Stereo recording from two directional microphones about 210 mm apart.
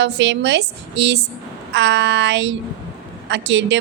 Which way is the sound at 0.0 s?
55° right (ahead or behind).